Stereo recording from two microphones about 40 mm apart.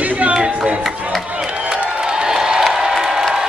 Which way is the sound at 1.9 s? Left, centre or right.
Right.